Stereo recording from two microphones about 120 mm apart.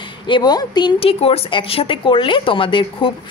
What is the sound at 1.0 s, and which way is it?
Speech, 55° left (ahead or behind).